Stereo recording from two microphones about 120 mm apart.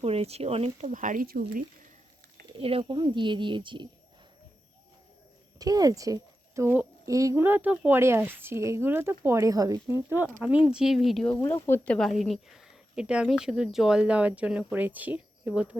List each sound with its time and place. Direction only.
0.0 s speech: 55° right (ahead or behind)
0.9 s speech: 90° right
2.6 s speech: 50° right (ahead or behind)
2.9 s a woman's voice: 40° right (ahead or behind)
5.5 s speech: 30° right (ahead or behind); by 11.4 s centre (ahead or behind)
11.4 s speech: 20° left (ahead or behind)
11.9 s a woman's voice: centre (ahead or behind)